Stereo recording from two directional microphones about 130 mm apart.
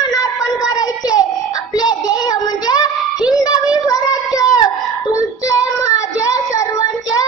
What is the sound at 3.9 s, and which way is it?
Child singing, 25° left (ahead or behind).